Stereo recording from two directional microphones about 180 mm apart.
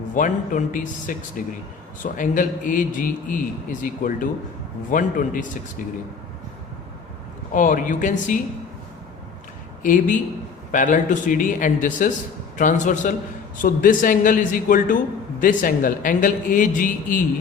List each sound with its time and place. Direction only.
0.1 s a man's voice: 45° left (ahead or behind)
7.5 s a man's voice: 45° left (ahead or behind)
9.8 s a man's voice: 45° left (ahead or behind)